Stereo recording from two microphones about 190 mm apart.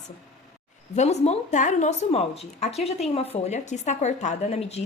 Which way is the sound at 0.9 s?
35° left (ahead or behind).